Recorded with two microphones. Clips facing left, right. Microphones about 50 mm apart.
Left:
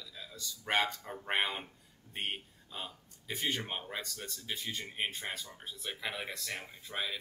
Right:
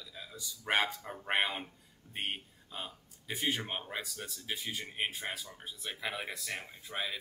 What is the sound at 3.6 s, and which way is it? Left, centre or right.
Speech, centre.